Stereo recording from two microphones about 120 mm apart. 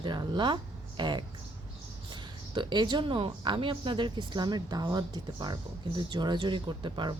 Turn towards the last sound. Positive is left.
turn(degrees=-40)  # may be behind; listen again after turning